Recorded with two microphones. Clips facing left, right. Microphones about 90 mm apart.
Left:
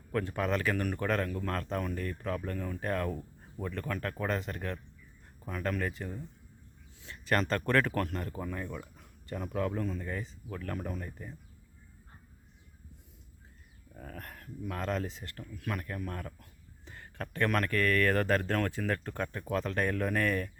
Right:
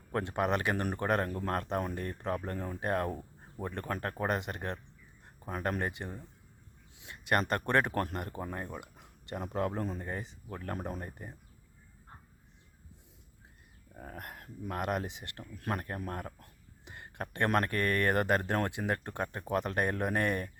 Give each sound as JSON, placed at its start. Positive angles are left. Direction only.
{"t": 0.1, "sound": "speech", "side_deg": -25}
{"t": 4.3, "sound": "speech", "side_deg": -20}
{"t": 7.0, "sound": "a sound", "side_deg": -15}
{"t": 7.6, "sound": "speech", "side_deg": -25}
{"t": 13.9, "sound": "a sound", "side_deg": -25}
{"t": 14.8, "sound": "speech", "side_deg": -20}
{"t": 15.5, "sound": "speech", "side_deg": -35}
{"t": 16.8, "sound": "speech", "side_deg": -20}